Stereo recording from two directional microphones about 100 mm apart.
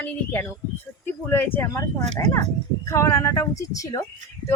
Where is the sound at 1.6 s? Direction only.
35° left (ahead or behind).